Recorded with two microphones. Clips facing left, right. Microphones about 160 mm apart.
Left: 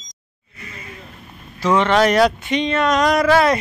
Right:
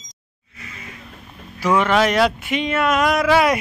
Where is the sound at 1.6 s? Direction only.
10° right (ahead or behind).